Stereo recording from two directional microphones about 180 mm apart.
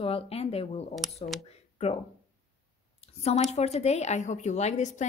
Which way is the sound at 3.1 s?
35° left (ahead or behind).